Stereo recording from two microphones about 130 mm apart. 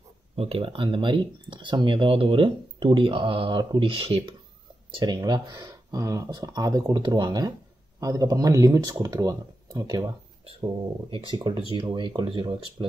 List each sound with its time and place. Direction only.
0.4 s speech: 45° right (ahead or behind); by 10.0 s 30° right (ahead or behind)
10.4 s speech: 40° right (ahead or behind)